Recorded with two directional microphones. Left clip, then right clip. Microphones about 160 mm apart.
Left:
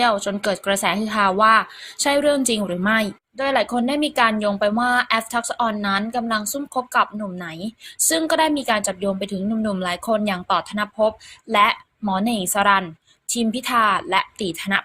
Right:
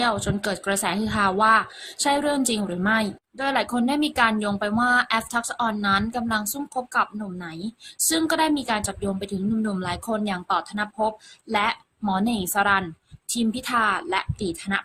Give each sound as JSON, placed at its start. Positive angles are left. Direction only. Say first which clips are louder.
{"t": 0.0, "sound": "a woman's voice", "louder": "left 5 dB", "side_deg": 10}
{"t": 3.3, "sound": "a woman's voice", "louder": "left 4 dB", "side_deg": 5}